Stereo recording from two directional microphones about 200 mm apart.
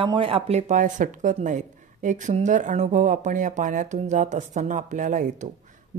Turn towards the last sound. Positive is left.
turn(degrees=-40)  # may be behind; listen again after turning